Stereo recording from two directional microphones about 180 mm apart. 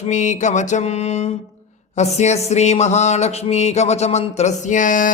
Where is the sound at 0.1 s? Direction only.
40° left (ahead or behind).